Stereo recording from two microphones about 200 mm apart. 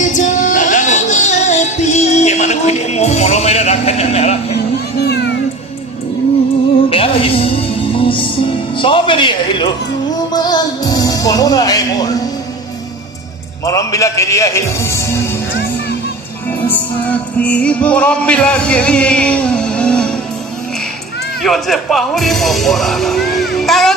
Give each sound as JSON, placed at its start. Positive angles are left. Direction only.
{"t": 0.0, "sound": "music", "side_deg": 40}
{"t": 4.9, "sound": "a sound", "side_deg": 55}
{"t": 6.9, "sound": "music", "side_deg": 30}
{"t": 8.8, "sound": "a man's voice", "side_deg": 25}
{"t": 13.7, "sound": "a man's voice", "side_deg": 15}
{"t": 16.6, "sound": "music", "side_deg": 5}
{"t": 21.4, "sound": "speech", "side_deg": 0}